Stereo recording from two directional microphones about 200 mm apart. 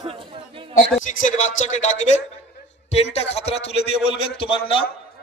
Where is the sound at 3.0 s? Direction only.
30° left (ahead or behind).